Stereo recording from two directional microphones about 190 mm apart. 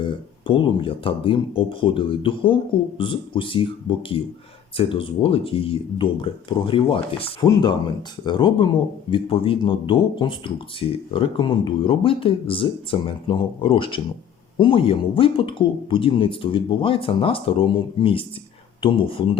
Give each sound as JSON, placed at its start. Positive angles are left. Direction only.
{"t": 0.0, "sound": "speech", "side_deg": 25}